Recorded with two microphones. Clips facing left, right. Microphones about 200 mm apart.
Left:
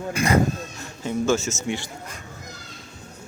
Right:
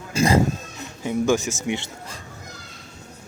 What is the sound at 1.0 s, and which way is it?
Speech, 15° right (ahead or behind).